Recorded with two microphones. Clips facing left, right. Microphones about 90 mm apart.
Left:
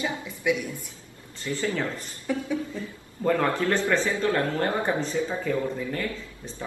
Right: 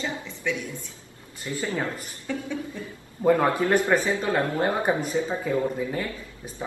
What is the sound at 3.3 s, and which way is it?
Speech, 15° right (ahead or behind).